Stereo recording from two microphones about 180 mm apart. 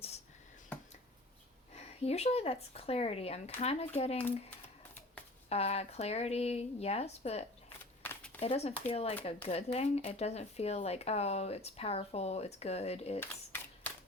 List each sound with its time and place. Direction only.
1.7 s speech: 35° left (ahead or behind)
5.5 s speech: 35° left (ahead or behind)
8.0 s a sound: 10° left (ahead or behind)
8.4 s speech: 35° left (ahead or behind)
13.1 s camera: 10° left (ahead or behind)